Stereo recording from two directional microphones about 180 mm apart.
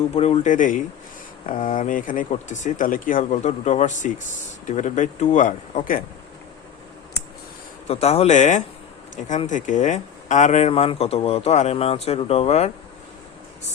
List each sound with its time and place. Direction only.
0.1 s speech: 35° left (ahead or behind)
7.9 s speech: 35° left (ahead or behind)